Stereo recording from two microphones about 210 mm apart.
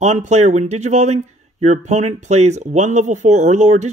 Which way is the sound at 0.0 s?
30° right (ahead or behind).